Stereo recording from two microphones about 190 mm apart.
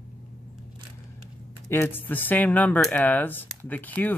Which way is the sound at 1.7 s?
10° left (ahead or behind).